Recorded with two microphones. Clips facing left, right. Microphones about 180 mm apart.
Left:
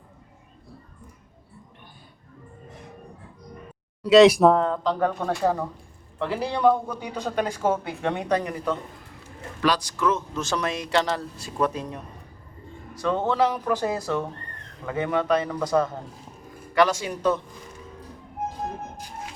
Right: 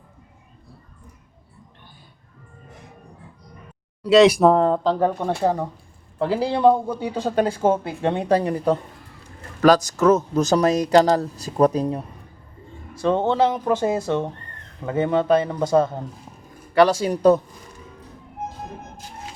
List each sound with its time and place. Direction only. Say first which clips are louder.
4.1 s speech: right 1 dB; centre (ahead or behind)
4.6 s speech: right 5 dB; 35° right (ahead or behind)